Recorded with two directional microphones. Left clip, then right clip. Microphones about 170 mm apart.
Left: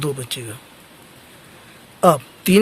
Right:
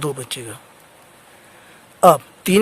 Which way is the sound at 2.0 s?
45° right (ahead or behind).